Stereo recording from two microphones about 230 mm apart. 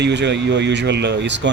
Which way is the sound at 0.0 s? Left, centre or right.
Right.